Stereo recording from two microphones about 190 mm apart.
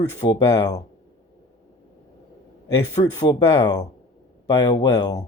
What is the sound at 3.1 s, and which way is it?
Speech, 20° left (ahead or behind).